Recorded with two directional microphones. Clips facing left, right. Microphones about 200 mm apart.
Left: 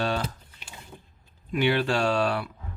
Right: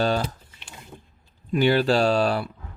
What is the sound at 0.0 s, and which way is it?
Speech, 35° right (ahead or behind).